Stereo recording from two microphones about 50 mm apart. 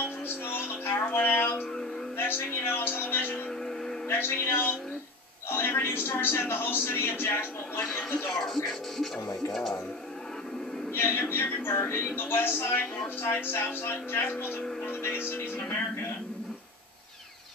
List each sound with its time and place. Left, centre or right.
0.5 s a sound: left
1.1 s music: left
2.1 s a woman's voice: left
8.3 s speech: centre
11.0 s a man's voice: left